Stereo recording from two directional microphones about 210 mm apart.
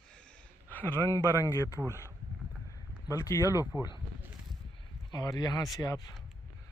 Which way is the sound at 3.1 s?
15° left (ahead or behind).